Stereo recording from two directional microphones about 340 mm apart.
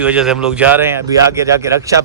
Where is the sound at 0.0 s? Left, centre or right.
Centre.